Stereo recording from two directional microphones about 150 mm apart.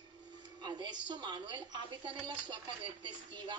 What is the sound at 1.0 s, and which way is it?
A woman's voice, 30° right (ahead or behind).